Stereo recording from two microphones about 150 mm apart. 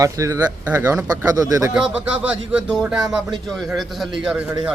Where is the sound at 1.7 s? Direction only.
5° right (ahead or behind).